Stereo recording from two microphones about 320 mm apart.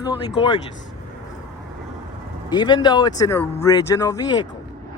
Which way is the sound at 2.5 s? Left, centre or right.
Centre.